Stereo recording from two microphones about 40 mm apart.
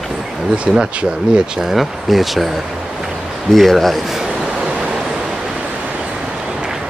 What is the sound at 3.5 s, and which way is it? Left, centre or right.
Speech, centre.